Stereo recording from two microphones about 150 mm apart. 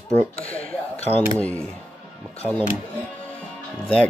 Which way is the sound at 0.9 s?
45° left (ahead or behind).